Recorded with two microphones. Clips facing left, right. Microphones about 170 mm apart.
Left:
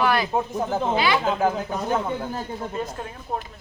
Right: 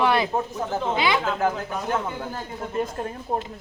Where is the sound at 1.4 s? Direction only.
15° left (ahead or behind).